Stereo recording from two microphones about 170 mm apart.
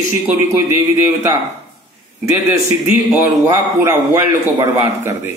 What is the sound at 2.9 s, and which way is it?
A man's voice, 15° right (ahead or behind).